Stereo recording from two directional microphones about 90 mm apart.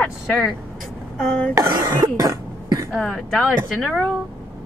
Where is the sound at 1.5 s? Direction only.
40° right (ahead or behind).